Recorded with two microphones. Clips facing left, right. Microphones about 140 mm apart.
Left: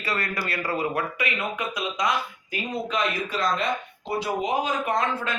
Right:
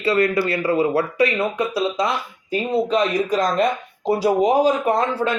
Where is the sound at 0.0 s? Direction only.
25° right (ahead or behind).